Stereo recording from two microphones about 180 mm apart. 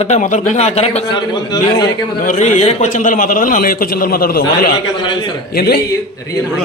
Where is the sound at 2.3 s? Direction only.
40° left (ahead or behind); by 4.6 s 55° left (ahead or behind).